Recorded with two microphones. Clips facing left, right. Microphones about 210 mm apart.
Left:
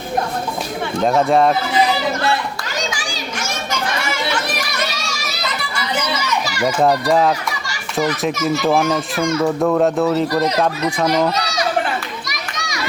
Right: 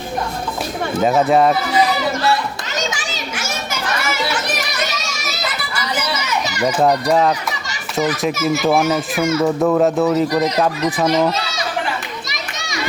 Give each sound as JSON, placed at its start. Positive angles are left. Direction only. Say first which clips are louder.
{"t": 0.9, "sound": "a child's voice", "louder": "right 1 dB", "side_deg": -5}
{"t": 2.9, "sound": "children playing", "louder": "even", "side_deg": -20}
{"t": 3.3, "sound": "children playing", "louder": "left 3 dB", "side_deg": -5}
{"t": 6.7, "sound": "a child's voice", "louder": "even", "side_deg": 0}
{"t": 12.3, "sound": "children playing", "louder": "left 1 dB", "side_deg": -25}